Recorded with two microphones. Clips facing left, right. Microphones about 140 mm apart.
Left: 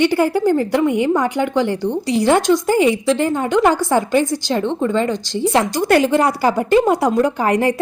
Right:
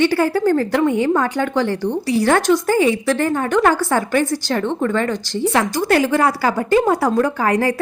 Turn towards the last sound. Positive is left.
turn(degrees=20)  # may be behind; listen again after turning